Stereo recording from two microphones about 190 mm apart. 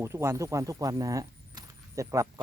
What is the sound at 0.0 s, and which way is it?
Speech, 15° right (ahead or behind).